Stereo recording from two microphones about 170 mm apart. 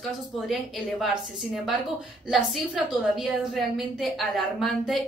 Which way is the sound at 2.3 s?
5° right (ahead or behind).